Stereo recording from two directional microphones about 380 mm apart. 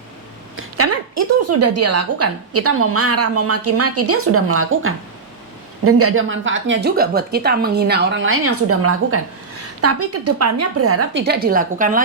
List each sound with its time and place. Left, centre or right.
0.5 s a woman's voice: right